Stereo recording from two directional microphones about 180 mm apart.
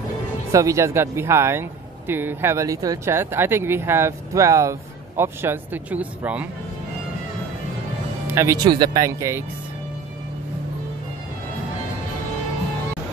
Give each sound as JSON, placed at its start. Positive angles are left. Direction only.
{"t": 0.5, "sound": "speech", "side_deg": -15}
{"t": 8.3, "sound": "speech", "side_deg": -15}